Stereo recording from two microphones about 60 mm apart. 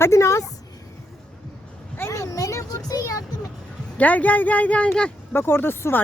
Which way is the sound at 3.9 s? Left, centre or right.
Left.